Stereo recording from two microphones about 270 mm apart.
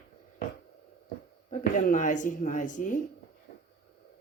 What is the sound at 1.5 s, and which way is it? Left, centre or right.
Speech, left.